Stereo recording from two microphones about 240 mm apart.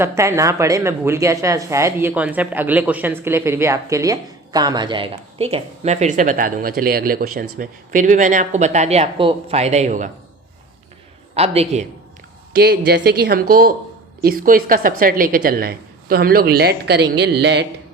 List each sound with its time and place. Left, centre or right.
0.0 s speech: centre; by 10.1 s right
11.3 s a man's voice: right
12.5 s a woman's voice: right